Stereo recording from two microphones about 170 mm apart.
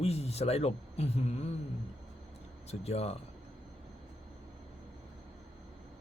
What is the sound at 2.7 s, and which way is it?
Speech, 40° left (ahead or behind).